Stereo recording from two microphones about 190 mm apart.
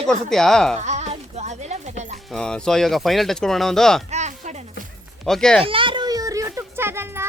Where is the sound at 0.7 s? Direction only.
35° right (ahead or behind).